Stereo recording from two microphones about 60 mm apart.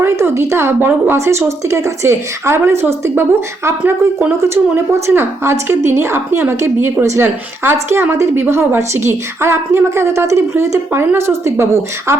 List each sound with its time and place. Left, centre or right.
0.0 s a woman's voice: right
1.1 s a woman's voice: right